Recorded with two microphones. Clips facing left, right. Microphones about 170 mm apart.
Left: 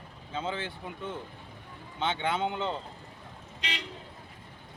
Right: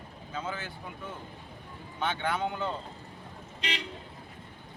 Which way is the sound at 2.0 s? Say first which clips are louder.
Left 1 dB; 25° left (ahead or behind).